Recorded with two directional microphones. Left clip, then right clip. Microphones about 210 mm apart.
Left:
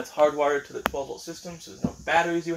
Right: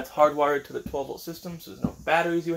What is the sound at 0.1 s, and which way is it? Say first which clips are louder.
Speech: right 1 dB; 30° right (ahead or behind).